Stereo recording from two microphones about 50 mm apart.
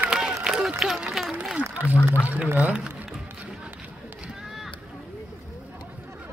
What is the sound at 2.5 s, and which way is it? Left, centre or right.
Speech, right.